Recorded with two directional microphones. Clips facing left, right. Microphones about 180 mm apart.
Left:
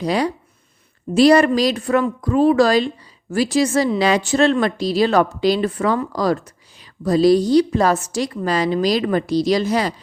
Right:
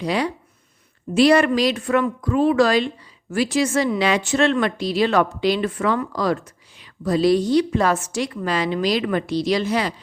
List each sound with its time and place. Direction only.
0.0 s speech: 40° left (ahead or behind)